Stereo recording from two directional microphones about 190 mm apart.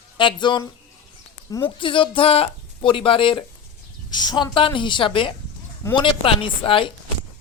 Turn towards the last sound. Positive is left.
turn(degrees=25)  # may be behind; listen again after turning